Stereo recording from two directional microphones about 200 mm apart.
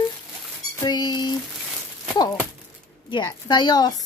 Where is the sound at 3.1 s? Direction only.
20° left (ahead or behind).